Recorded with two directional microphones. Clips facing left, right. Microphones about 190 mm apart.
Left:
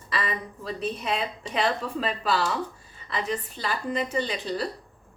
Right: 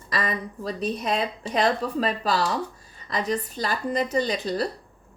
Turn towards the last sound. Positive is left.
turn(degrees=-40)  # may be behind; listen again after turning